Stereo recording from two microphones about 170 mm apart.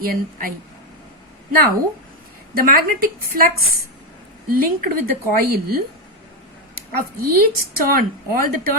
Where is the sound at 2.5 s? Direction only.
60° right (ahead or behind).